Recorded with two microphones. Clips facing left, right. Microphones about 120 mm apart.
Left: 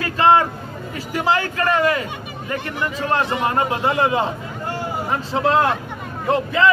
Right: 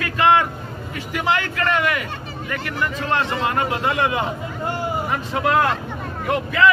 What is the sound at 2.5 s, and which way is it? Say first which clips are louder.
A man's voice: left 1 dB; 20° left (ahead or behind).